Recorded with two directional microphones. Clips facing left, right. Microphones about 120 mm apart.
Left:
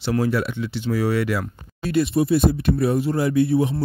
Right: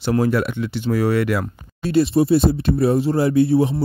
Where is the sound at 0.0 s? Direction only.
50° right (ahead or behind).